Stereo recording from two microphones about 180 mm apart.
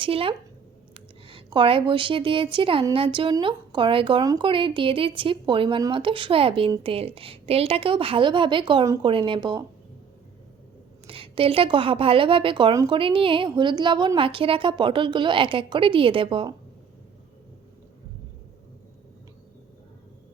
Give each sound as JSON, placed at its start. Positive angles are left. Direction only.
{"t": 0.0, "sound": "a woman's voice", "side_deg": -30}
{"t": 11.0, "sound": "speech", "side_deg": -30}